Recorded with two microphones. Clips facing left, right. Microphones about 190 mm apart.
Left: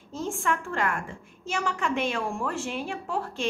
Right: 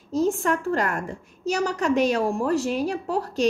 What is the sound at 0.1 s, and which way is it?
Speech, 40° right (ahead or behind).